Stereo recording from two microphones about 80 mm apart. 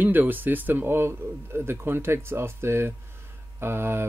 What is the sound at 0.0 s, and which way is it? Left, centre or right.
Speech, right.